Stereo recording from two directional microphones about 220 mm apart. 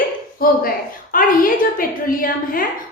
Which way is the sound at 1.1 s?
40° left (ahead or behind).